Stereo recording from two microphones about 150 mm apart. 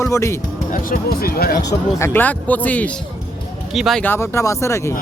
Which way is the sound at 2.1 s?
10° left (ahead or behind).